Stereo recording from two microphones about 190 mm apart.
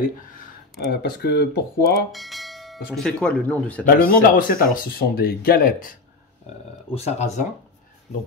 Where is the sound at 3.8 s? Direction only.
50° left (ahead or behind).